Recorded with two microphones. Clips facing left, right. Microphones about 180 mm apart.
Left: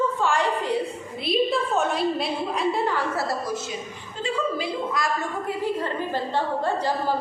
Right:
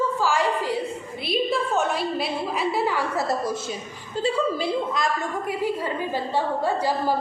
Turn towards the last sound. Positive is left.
turn(degrees=-10)  # may be behind; listen again after turning